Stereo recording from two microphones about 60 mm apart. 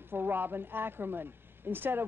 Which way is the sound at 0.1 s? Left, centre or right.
Right.